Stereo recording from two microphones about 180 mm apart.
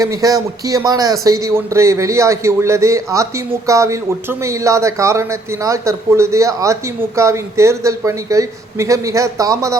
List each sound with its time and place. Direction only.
0.0 s a man's voice: 20° right (ahead or behind)